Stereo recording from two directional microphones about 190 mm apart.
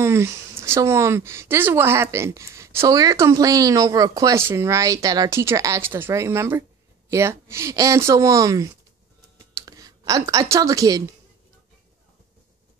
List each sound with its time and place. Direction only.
0.0 s a woman's voice: 15° right (ahead or behind)